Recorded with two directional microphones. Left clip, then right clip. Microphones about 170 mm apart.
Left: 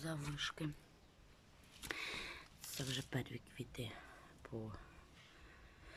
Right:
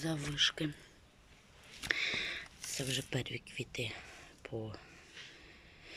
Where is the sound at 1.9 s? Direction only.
15° left (ahead or behind).